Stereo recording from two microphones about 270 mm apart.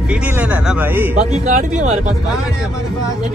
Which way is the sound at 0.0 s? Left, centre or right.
Centre.